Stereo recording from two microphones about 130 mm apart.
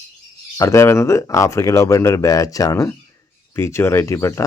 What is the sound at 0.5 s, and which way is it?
Speech, 20° left (ahead or behind).